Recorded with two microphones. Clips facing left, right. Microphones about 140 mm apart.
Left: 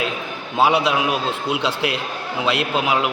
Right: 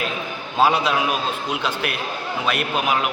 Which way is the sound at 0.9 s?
20° left (ahead or behind).